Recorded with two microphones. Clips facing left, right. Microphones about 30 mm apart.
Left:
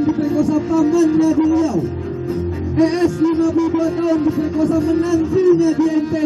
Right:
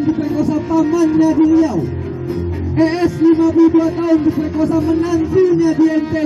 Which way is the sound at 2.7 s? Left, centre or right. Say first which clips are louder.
Right 1 dB; centre.